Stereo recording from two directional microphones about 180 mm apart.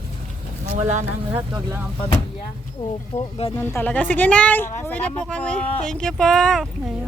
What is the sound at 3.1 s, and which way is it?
Speech, 35° left (ahead or behind).